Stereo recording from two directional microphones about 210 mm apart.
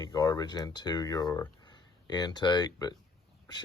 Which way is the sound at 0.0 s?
20° left (ahead or behind).